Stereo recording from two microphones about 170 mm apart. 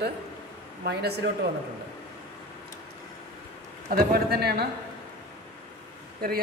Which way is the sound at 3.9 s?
60° right (ahead or behind).